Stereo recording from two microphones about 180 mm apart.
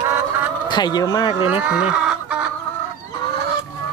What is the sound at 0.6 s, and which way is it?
Speech, 25° left (ahead or behind).